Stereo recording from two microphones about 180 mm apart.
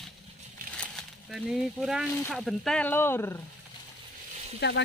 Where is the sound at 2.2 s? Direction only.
Centre (ahead or behind).